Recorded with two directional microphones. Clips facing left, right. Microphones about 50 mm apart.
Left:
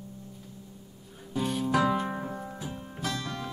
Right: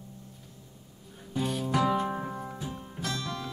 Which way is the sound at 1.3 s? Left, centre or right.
Centre.